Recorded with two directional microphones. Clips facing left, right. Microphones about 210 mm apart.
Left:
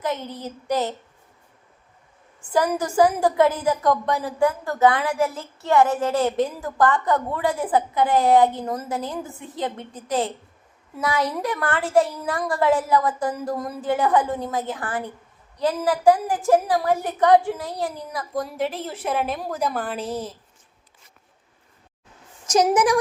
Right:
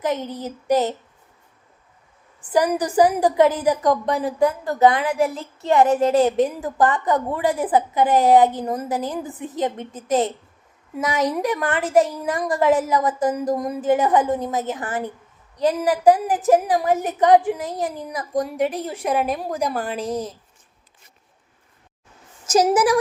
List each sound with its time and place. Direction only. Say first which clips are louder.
0.0 s a woman's voice: right 3 dB; 15° right (ahead or behind)
2.4 s a woman's voice: right 2 dB; 15° right (ahead or behind)
20.0 s speech: right 3 dB; 5° left (ahead or behind)
22.4 s a woman's voice: right 1 dB; 5° right (ahead or behind)